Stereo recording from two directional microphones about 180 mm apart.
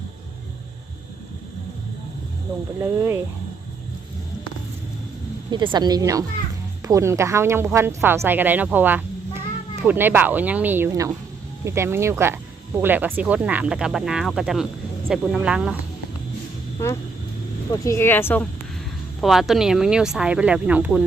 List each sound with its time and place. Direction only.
2.8 s speech: 15° right (ahead or behind)
5.5 s a woman's voice: 25° right (ahead or behind); by 15.8 s 5° right (ahead or behind)
17.8 s speech: 15° left (ahead or behind)
19.2 s speech: centre (ahead or behind)